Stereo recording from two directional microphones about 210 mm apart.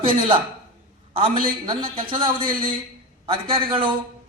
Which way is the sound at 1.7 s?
25° right (ahead or behind).